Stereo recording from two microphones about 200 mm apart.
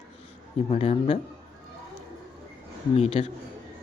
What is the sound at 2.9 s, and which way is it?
Speech, 30° left (ahead or behind).